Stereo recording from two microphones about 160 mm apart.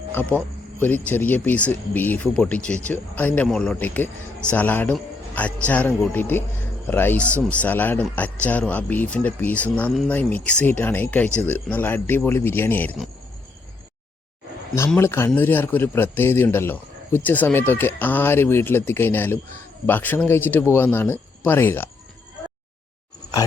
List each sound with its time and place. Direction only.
0.1 s a man's voice: 10° left (ahead or behind)
14.9 s a man's voice: 15° left (ahead or behind)